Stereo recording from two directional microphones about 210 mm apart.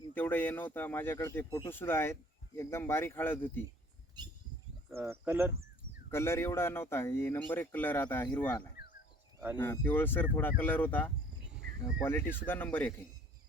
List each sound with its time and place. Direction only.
0.1 s speech: 10° left (ahead or behind)
4.9 s speech: 10° right (ahead or behind)
6.1 s speech: 10° left (ahead or behind)
8.7 s a sound: 45° left (ahead or behind)
9.6 s speech: 10° left (ahead or behind)